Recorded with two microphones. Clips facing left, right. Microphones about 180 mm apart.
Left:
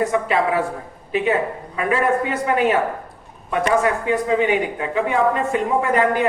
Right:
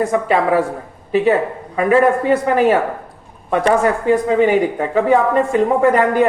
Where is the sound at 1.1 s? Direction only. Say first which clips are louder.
Right 5 dB; 40° right (ahead or behind).